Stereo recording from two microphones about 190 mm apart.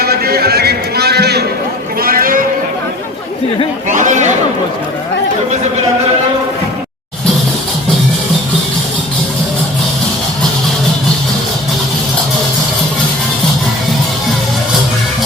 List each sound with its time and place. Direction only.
0.0 s a sound: 55° right (ahead or behind)
2.0 s sheep: 50° right (ahead or behind)
3.8 s speech: 40° right (ahead or behind)